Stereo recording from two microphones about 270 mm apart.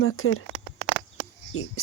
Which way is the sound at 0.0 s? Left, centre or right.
Left.